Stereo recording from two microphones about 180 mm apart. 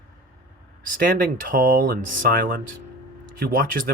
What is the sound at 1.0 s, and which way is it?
Speech, 50° right (ahead or behind).